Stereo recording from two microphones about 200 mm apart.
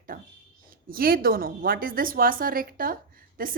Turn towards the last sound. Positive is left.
turn(degrees=-45)  # may be behind; listen again after turning